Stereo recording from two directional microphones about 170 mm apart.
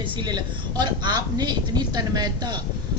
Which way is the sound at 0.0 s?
25° right (ahead or behind).